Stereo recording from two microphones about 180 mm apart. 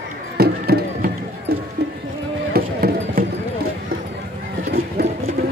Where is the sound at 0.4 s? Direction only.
60° right (ahead or behind).